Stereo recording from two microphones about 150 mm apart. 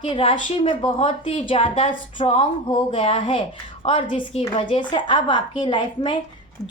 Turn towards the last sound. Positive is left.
turn(degrees=30)  # may be behind; listen again after turning